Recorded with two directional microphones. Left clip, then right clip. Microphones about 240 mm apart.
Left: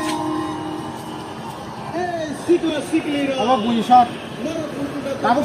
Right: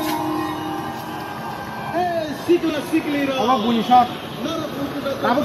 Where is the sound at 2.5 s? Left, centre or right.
Centre.